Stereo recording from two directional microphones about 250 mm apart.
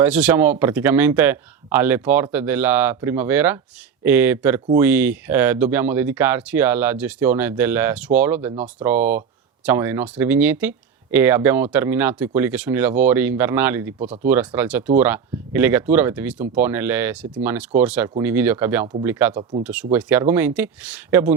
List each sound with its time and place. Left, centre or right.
0.0 s speech: centre
19.3 s speech: right
19.6 s speech: centre